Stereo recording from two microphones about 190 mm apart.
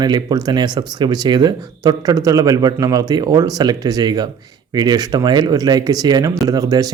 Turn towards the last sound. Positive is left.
turn(degrees=-20)  # may be behind; listen again after turning